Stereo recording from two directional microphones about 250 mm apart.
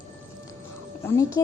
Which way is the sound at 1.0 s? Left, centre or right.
Centre.